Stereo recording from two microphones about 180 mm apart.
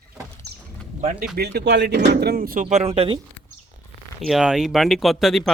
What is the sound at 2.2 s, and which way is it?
Speech, 55° right (ahead or behind).